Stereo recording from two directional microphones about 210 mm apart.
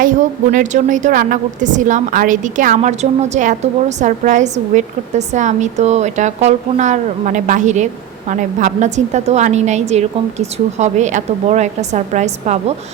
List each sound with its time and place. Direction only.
0.0 s a woman's voice: 40° right (ahead or behind)